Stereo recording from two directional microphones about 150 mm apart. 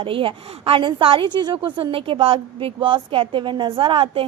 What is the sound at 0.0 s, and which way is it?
A woman's voice, 35° right (ahead or behind).